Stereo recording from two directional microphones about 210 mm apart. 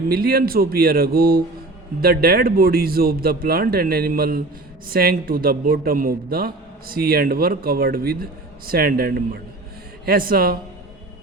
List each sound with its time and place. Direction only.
0.1 s a man's voice: 45° right (ahead or behind)